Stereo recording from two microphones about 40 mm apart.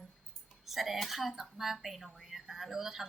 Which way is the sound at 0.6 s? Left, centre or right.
Centre.